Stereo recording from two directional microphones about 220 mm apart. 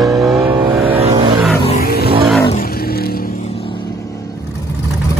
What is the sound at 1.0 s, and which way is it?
Vehicle, 25° right (ahead or behind).